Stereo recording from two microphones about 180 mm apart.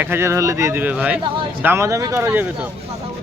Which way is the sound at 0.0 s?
15° right (ahead or behind).